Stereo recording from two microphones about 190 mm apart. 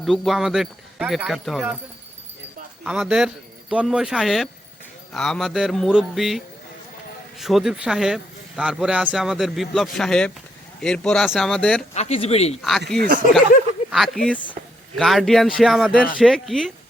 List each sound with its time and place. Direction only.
0.0 s speech: centre (ahead or behind)
2.8 s speech: 5° right (ahead or behind)
11.9 s speech: 35° left (ahead or behind)
13.0 s speech: 45° right (ahead or behind)
13.9 s speech: centre (ahead or behind)